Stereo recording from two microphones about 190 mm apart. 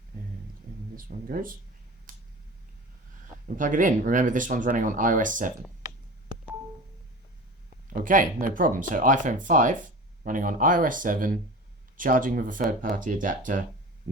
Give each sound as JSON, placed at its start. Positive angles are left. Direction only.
{"t": 0.9, "sound": "speech", "side_deg": -45}
{"t": 2.1, "sound": "a sound", "side_deg": -45}
{"t": 3.6, "sound": "speech", "side_deg": -45}
{"t": 7.9, "sound": "speech", "side_deg": -45}